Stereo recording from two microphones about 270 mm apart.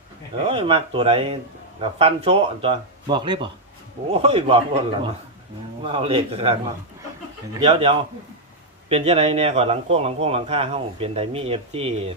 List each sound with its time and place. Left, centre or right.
0.4 s a man's voice: right